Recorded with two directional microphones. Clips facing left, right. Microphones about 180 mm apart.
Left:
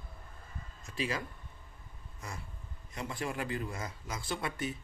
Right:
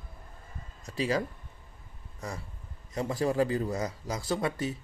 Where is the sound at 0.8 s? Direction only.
35° right (ahead or behind).